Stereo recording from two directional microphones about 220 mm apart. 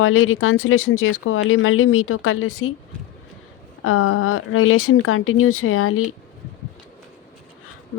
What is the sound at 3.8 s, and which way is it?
Speech, 75° left (ahead or behind).